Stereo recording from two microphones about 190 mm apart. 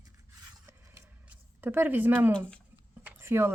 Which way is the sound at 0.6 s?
10° right (ahead or behind).